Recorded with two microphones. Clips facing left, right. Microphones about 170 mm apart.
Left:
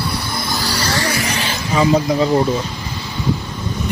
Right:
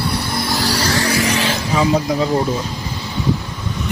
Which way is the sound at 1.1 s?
90° right.